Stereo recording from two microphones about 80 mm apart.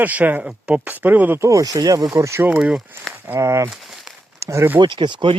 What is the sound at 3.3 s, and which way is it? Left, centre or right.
Speech, right.